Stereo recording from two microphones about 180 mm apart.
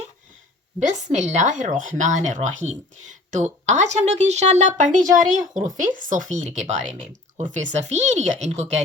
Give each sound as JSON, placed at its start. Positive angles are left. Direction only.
{"t": 0.8, "sound": "a woman's voice", "side_deg": -40}